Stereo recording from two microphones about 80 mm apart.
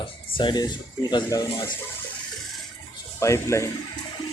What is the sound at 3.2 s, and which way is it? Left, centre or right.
Speech, left.